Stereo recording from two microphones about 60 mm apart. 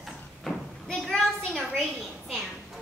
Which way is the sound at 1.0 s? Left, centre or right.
Centre.